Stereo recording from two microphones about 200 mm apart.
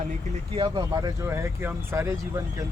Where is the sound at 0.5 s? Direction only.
25° right (ahead or behind).